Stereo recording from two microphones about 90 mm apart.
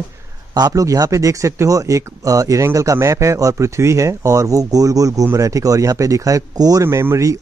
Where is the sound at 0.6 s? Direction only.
45° right (ahead or behind).